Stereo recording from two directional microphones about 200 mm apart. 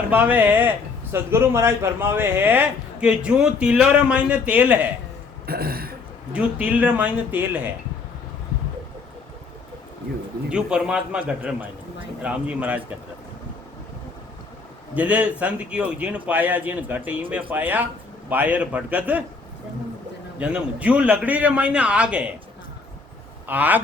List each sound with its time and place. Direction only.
0.1 s speech: 10° right (ahead or behind)
5.5 s throat clearing: 50° right (ahead or behind)
6.3 s speech: 5° right (ahead or behind)
10.5 s a man's voice: 5° right (ahead or behind)
14.9 s speech: 5° right (ahead or behind)
20.4 s a man's voice: 5° right (ahead or behind)
23.5 s speech: 10° right (ahead or behind)